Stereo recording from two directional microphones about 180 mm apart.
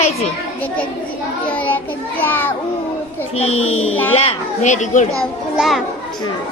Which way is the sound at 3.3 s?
35° left (ahead or behind).